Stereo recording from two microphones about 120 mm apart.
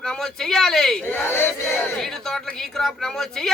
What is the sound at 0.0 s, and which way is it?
Speech, 5° left (ahead or behind).